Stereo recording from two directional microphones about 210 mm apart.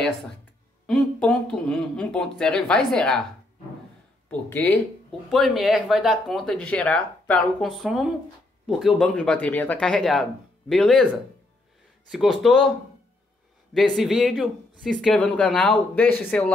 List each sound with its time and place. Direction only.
0.8 s speech: 5° left (ahead or behind)
4.3 s speech: 10° left (ahead or behind)
12.1 s speech: centre (ahead or behind)
13.7 s speech: centre (ahead or behind)